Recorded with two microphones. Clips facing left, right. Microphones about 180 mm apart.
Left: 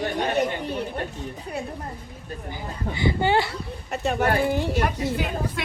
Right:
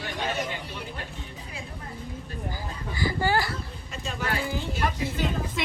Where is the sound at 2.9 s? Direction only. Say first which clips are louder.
Left 4 dB; 25° left (ahead or behind).